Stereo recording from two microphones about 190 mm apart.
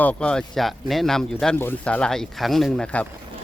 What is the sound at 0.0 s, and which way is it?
Speech, 5° left (ahead or behind).